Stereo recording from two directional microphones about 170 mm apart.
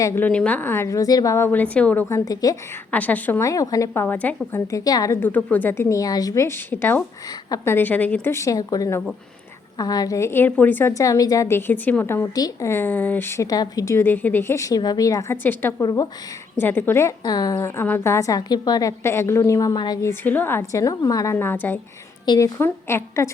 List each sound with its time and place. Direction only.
0.0 s a woman's voice: 10° left (ahead or behind)
2.9 s a woman's voice: 10° left (ahead or behind)